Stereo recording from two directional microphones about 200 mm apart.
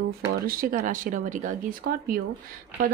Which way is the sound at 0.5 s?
45° right (ahead or behind).